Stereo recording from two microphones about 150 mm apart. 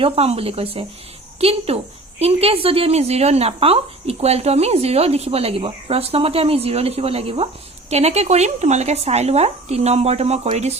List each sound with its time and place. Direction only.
0.0 s a woman's voice: 40° right (ahead or behind)